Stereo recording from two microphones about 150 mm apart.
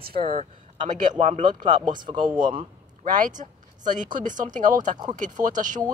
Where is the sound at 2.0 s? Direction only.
30° right (ahead or behind).